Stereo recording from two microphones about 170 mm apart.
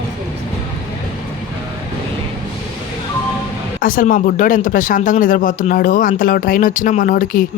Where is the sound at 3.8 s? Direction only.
55° left (ahead or behind).